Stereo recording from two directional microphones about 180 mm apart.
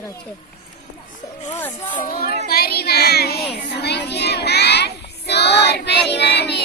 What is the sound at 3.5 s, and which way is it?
Speech, 65° left (ahead or behind).